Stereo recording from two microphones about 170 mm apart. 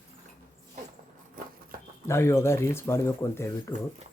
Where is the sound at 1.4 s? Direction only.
55° right (ahead or behind).